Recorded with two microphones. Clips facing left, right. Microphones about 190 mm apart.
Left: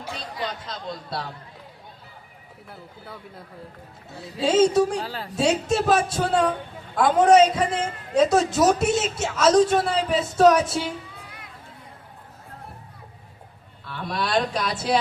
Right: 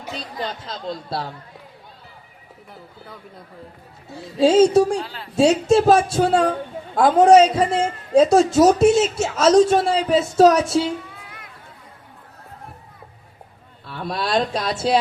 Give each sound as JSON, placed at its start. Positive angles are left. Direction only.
{"t": 0.6, "sound": "speech", "side_deg": -30}
{"t": 4.4, "sound": "speech", "side_deg": -30}
{"t": 5.0, "sound": "a woman's voice", "side_deg": 40}
{"t": 5.4, "sound": "speech", "side_deg": -30}
{"t": 13.8, "sound": "speech", "side_deg": -25}